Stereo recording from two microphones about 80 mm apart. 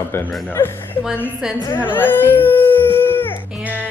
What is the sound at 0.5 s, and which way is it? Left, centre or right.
Speech, left.